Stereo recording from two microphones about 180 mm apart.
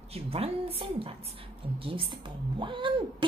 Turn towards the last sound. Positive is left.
turn(degrees=-25)  # may be behind; listen again after turning